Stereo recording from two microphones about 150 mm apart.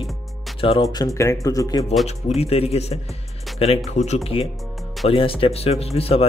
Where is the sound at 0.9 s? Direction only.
20° left (ahead or behind).